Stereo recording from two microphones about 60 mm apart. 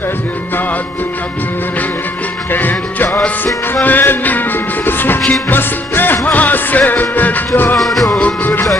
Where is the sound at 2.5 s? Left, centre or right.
Left.